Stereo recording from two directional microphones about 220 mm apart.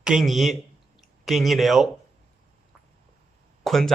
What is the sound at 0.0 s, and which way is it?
Speech, centre (ahead or behind).